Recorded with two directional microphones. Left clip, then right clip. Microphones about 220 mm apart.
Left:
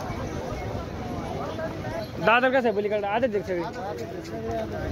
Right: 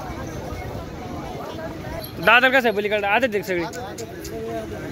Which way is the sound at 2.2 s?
5° right (ahead or behind).